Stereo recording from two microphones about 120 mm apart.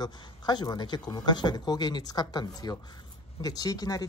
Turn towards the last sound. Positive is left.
turn(degrees=30)  # may be behind; listen again after turning